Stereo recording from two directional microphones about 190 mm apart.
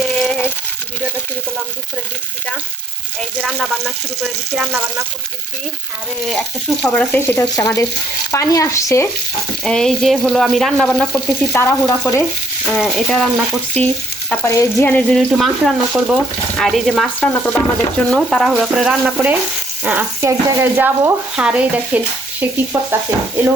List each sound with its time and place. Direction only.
0.0 s a sound: centre (ahead or behind)
3.4 s frying: centre (ahead or behind)
6.2 s speech: centre (ahead or behind)
9.6 s frying: centre (ahead or behind)
11.5 s speech: 15° left (ahead or behind)
12.6 s frying: 5° left (ahead or behind)
15.3 s frying: centre (ahead or behind)
19.8 s speech: 10° right (ahead or behind)